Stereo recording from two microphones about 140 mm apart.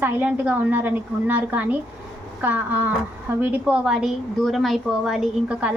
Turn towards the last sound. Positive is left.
turn(degrees=-10)  # may be behind; listen again after turning